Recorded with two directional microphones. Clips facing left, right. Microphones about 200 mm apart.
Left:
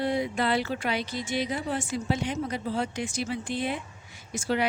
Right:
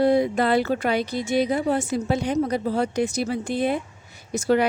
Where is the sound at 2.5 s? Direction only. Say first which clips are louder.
Right 6 dB; 40° right (ahead or behind).